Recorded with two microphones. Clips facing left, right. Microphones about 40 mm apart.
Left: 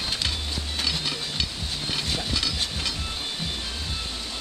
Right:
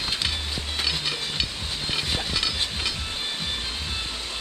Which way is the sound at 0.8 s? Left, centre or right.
Centre.